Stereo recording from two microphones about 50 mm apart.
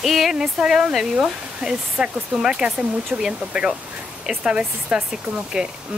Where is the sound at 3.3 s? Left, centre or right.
Right.